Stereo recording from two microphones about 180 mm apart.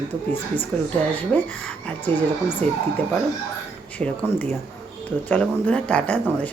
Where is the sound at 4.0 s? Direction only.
10° left (ahead or behind).